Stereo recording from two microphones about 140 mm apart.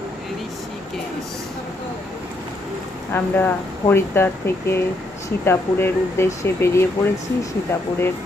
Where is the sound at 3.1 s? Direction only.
15° left (ahead or behind).